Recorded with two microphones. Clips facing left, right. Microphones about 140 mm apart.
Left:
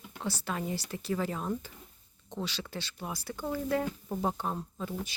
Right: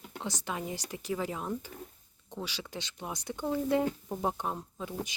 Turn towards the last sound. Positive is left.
turn(degrees=-15)  # may be behind; listen again after turning